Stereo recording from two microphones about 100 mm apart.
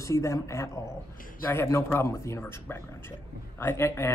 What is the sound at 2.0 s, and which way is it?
A man's voice, 30° left (ahead or behind).